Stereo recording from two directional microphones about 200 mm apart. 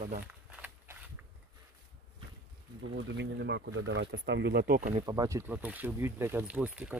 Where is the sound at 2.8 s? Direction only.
60° right (ahead or behind).